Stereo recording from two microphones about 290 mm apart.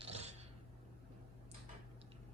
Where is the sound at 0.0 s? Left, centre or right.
Right.